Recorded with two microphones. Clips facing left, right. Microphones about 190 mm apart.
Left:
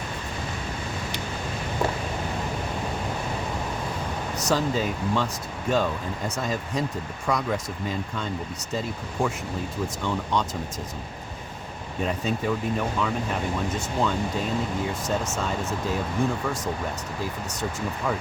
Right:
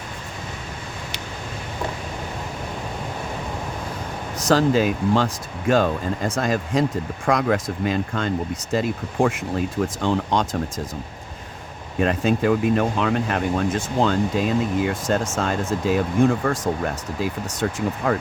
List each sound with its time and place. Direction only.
4.4 s speech: 90° right
7.3 s speech: 80° right
11.9 s speech: 80° right
16.5 s speech: 65° right (ahead or behind)